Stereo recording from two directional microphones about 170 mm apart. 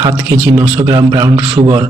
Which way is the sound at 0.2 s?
10° right (ahead or behind).